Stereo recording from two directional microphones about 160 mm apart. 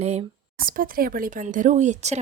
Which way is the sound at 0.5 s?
60° right (ahead or behind).